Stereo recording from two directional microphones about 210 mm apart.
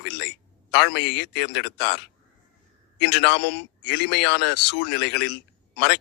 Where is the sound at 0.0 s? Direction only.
55° left (ahead or behind).